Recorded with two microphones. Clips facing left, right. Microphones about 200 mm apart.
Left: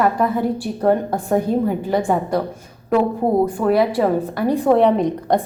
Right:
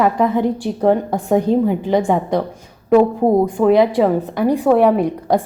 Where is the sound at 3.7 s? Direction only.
20° right (ahead or behind).